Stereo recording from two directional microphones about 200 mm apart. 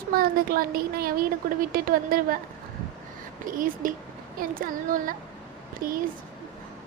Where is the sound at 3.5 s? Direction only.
45° right (ahead or behind).